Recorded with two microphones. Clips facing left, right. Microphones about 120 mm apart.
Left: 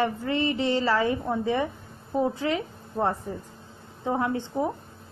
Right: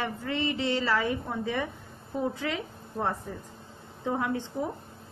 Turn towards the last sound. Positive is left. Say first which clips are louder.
# left 4 dB
turn(degrees=30)  # may be behind; listen again after turning